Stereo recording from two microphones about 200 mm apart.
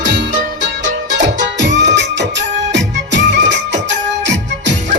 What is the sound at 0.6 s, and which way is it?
Music, 60° right (ahead or behind).